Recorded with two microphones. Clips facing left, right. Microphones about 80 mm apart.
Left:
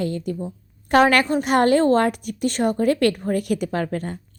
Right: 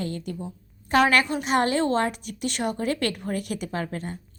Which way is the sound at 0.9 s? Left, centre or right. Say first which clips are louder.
Left 4 dB; left.